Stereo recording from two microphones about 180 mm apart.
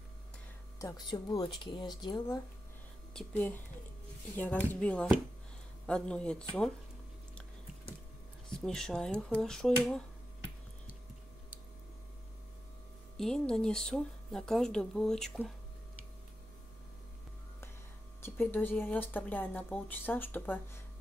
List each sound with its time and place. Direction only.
0.7 s speech: 20° left (ahead or behind)
3.1 s speech: 5° left (ahead or behind)
8.5 s speech: 5° left (ahead or behind)
13.2 s speech: 5° left (ahead or behind)
18.2 s speech: 10° left (ahead or behind)